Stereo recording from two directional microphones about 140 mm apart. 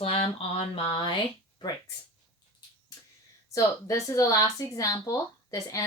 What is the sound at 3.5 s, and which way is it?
Speech, 20° left (ahead or behind).